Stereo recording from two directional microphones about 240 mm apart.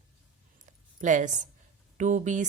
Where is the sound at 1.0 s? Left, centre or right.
Right.